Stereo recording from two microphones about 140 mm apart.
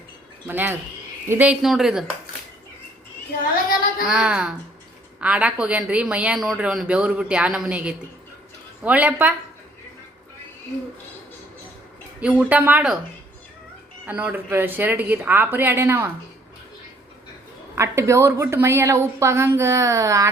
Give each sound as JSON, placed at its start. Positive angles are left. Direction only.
{"t": 0.4, "sound": "a woman's voice", "side_deg": -15}
{"t": 4.1, "sound": "a woman's voice", "side_deg": -5}
{"t": 12.2, "sound": "a woman's voice", "side_deg": -10}
{"t": 14.1, "sound": "a woman's voice", "side_deg": -10}
{"t": 17.7, "sound": "a woman's voice", "side_deg": -20}